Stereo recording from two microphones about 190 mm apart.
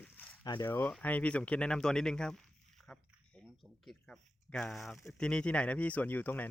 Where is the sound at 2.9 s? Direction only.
5° left (ahead or behind).